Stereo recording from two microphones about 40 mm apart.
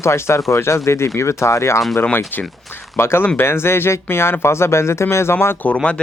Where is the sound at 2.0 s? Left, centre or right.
Left.